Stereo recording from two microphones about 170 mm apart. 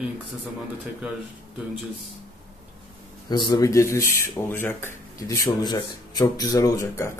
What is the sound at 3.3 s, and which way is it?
Speech, 25° left (ahead or behind).